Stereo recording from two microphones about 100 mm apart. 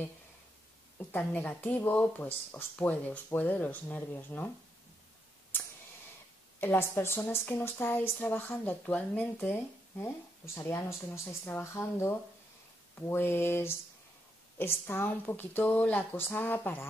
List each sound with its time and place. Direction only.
0.9 s speech: 20° left (ahead or behind)
6.6 s a woman's voice: 25° left (ahead or behind)
13.1 s a woman's voice: 25° left (ahead or behind)